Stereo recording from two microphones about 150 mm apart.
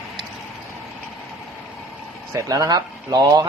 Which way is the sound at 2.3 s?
20° right (ahead or behind).